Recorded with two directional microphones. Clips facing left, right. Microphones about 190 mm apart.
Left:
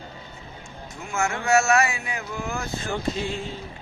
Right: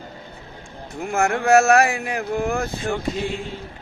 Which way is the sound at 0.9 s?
60° right (ahead or behind).